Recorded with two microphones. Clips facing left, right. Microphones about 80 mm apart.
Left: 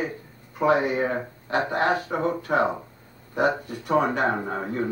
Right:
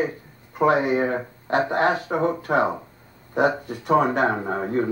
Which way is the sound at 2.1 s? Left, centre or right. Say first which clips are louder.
Right 3 dB; right.